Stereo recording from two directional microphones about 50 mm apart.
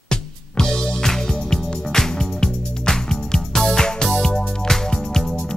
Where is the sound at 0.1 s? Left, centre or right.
Centre.